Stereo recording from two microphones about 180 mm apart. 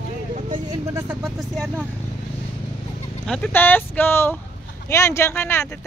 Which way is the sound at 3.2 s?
5° left (ahead or behind).